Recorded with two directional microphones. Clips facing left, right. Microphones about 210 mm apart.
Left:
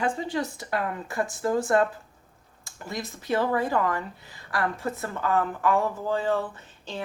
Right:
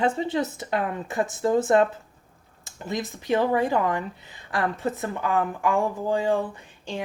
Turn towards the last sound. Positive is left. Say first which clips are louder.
# right 4 dB
turn(degrees=-15)  # may be behind; listen again after turning